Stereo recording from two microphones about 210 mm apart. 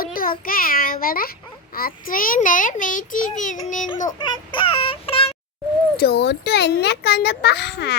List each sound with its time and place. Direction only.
0.0 s a child's voice: 40° left (ahead or behind)
4.2 s child singing: 25° left (ahead or behind)
6.0 s a child's voice: 50° left (ahead or behind)